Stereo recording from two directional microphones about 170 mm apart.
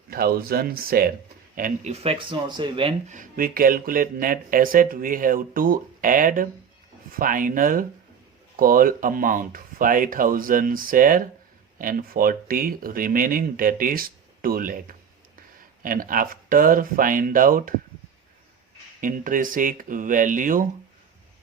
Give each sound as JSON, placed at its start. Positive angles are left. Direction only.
{"t": 0.1, "sound": "speech", "side_deg": -60}
{"t": 1.5, "sound": "speech", "side_deg": -50}
{"t": 3.1, "sound": "speech", "side_deg": -50}
{"t": 18.9, "sound": "speech", "side_deg": -50}